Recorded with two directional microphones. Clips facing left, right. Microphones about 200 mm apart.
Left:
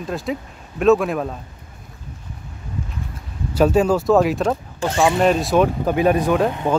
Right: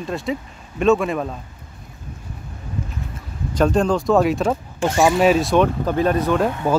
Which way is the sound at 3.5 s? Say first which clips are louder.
Left 2 dB; 5° left (ahead or behind).